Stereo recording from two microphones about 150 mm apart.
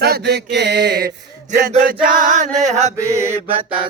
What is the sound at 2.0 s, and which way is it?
Chant, 60° right (ahead or behind).